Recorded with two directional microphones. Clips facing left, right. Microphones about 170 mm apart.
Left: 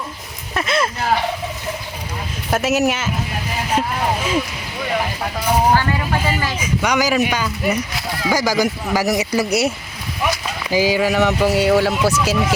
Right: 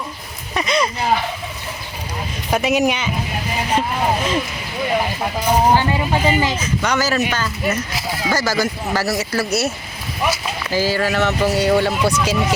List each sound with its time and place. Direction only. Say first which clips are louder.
0.5 s speech: right 1 dB; 5° left (ahead or behind)
2.5 s speech: even; 5° left (ahead or behind)
5.5 s speech: right 1 dB; 15° right (ahead or behind)
6.6 s speech: left 1 dB; 10° left (ahead or behind)
7.9 s speech: right 1 dB; centre (ahead or behind)
8.3 s speech: left 2 dB; 15° left (ahead or behind)